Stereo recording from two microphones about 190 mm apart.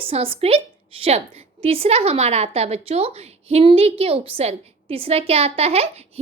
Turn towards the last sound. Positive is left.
turn(degrees=-35)  # may be behind; listen again after turning